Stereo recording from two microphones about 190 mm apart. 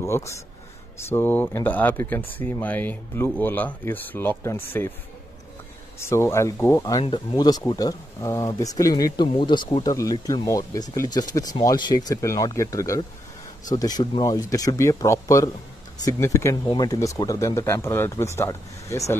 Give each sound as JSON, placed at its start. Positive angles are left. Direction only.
{"t": 0.0, "sound": "speech", "side_deg": 15}
{"t": 5.9, "sound": "speech", "side_deg": 15}